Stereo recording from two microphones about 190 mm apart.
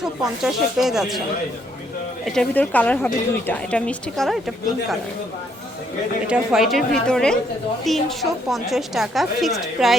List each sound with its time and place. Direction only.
0.0 s a woman's voice: 5° right (ahead or behind)
2.2 s speech: 5° left (ahead or behind)
6.2 s a woman's voice: 5° right (ahead or behind)